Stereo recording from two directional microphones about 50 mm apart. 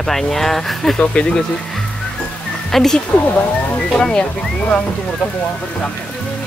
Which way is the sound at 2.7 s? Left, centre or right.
Centre.